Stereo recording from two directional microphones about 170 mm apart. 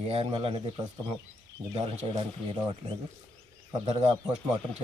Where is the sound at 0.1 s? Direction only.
35° right (ahead or behind).